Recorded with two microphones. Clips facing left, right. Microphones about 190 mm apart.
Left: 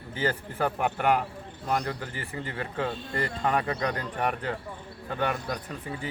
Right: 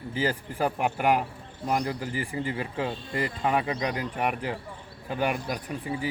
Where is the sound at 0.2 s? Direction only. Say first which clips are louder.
Right 1 dB; 10° right (ahead or behind).